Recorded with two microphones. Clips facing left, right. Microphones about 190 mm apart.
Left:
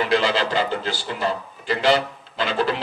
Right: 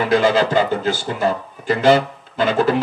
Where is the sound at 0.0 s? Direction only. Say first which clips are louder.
Right 5 dB; 50° right (ahead or behind).